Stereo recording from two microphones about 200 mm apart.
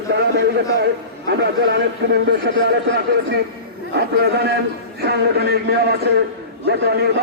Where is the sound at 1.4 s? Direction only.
60° right (ahead or behind).